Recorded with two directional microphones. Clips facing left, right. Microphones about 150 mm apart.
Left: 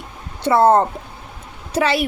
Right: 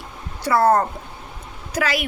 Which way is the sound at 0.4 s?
25° left (ahead or behind).